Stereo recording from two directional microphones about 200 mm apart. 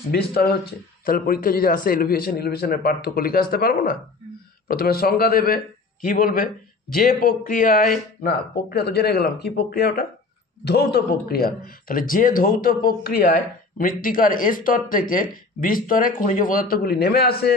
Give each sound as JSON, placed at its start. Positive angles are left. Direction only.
{"t": 0.1, "sound": "a man's voice", "side_deg": 50}